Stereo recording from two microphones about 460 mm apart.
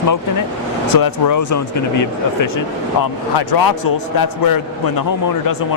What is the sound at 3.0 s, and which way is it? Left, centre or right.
Speech, left.